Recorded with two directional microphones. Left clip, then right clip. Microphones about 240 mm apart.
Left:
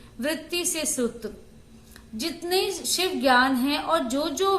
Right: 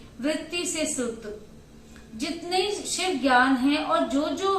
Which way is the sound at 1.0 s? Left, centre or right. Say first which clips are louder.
Left 2 dB; left.